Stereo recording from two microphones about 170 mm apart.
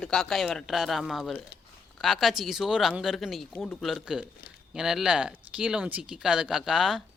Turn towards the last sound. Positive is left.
turn(degrees=0)  # may be behind; listen again after turning